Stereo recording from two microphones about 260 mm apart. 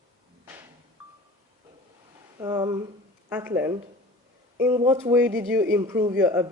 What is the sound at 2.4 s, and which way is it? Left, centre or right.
Speech, centre.